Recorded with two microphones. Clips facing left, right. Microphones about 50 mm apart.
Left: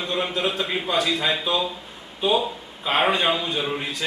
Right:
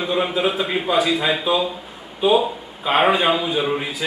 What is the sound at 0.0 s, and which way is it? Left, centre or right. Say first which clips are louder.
A man's voice: right 5 dB; centre.